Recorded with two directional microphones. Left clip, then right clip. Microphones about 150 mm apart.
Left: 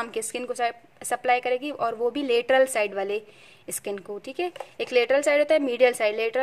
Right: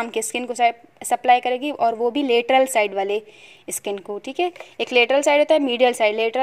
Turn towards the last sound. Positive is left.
turn(degrees=-10)  # may be behind; listen again after turning